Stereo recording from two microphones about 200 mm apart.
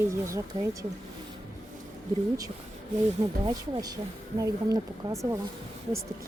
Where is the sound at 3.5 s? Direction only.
20° right (ahead or behind).